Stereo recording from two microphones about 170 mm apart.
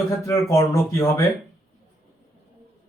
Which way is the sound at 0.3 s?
15° left (ahead or behind).